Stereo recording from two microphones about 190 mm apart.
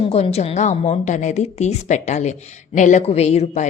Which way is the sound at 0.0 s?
30° left (ahead or behind).